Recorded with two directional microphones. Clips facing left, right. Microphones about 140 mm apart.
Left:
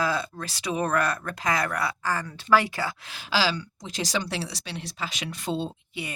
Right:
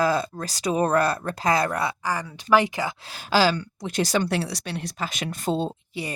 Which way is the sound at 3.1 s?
50° right (ahead or behind).